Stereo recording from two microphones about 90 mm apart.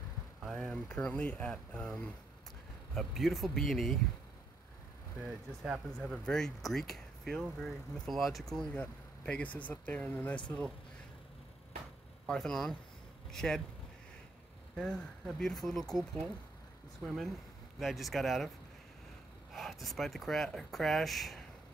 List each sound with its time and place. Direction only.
0.6 s speech: 5° left (ahead or behind)
5.3 s speech: centre (ahead or behind)
12.3 s speech: 5° left (ahead or behind)
14.8 s speech: 5° left (ahead or behind)
17.7 s speech: centre (ahead or behind)
19.5 s speech: centre (ahead or behind)